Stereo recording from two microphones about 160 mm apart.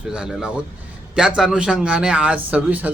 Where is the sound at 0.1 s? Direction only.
5° right (ahead or behind).